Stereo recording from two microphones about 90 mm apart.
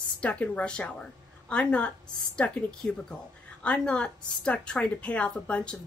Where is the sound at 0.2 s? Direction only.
15° left (ahead or behind).